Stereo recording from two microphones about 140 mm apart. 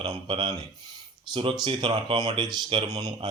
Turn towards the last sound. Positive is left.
turn(degrees=-25)  # may be behind; listen again after turning